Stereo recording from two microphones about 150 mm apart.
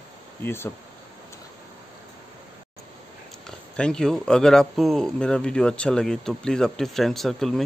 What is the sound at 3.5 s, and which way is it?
Speech, 5° left (ahead or behind).